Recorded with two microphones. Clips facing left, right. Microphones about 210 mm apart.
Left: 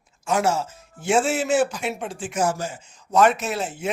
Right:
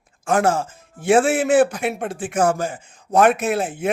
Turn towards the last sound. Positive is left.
turn(degrees=-55)  # may be behind; listen again after turning